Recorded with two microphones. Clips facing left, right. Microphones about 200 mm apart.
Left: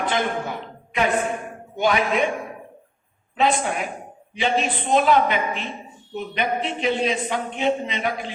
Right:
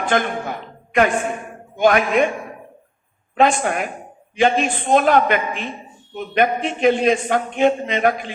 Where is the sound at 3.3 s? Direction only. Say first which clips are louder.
Right 4 dB; 50° right (ahead or behind).